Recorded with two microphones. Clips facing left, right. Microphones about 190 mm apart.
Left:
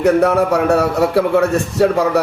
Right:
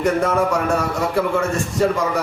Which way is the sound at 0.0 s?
65° left (ahead or behind).